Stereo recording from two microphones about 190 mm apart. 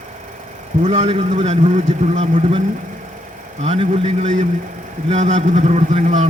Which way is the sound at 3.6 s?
35° right (ahead or behind).